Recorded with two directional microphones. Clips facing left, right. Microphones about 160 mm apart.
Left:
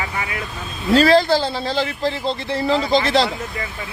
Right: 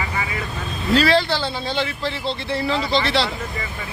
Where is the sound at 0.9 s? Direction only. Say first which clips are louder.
Left 4 dB; 40° left (ahead or behind).